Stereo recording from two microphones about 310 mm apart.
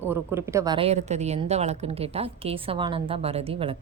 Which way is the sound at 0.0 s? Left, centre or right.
Centre.